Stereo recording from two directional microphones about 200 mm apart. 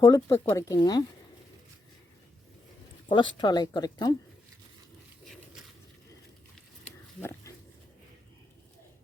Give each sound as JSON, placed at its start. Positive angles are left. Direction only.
{"t": 0.0, "sound": "speech", "side_deg": 15}
{"t": 3.1, "sound": "speech", "side_deg": 25}
{"t": 5.2, "sound": "a sound", "side_deg": 0}
{"t": 7.2, "sound": "pig", "side_deg": 15}